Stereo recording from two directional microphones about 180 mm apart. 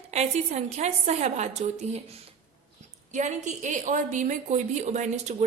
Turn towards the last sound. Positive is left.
turn(degrees=-40)  # may be behind; listen again after turning